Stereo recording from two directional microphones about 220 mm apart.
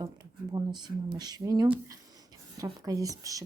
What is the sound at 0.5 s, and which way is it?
Speech, 20° right (ahead or behind).